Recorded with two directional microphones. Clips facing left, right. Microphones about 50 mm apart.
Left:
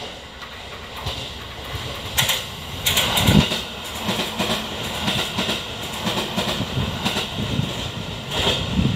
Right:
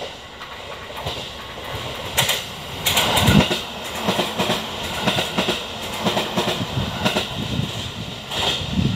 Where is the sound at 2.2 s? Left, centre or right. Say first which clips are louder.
Right 1 dB; centre.